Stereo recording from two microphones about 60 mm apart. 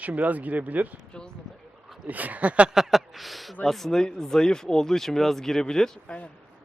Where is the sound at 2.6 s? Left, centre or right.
Centre.